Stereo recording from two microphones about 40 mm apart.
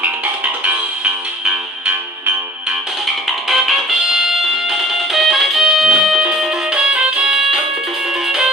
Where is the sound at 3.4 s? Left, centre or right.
Centre.